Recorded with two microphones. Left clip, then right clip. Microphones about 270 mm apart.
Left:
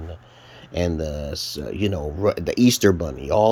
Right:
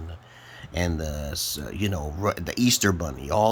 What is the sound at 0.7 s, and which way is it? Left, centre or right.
Speech, centre.